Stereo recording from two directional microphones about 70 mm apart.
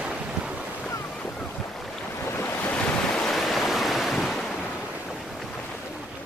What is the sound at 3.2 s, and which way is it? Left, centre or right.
Waves, centre.